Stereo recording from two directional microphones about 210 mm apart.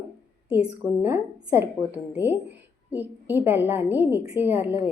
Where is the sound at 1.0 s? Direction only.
10° right (ahead or behind).